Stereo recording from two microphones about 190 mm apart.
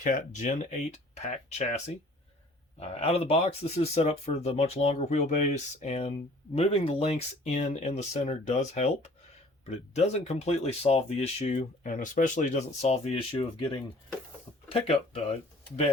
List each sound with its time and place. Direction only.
0.0 s speech: 45° left (ahead or behind)